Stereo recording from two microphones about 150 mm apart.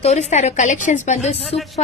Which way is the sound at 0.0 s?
50° left (ahead or behind).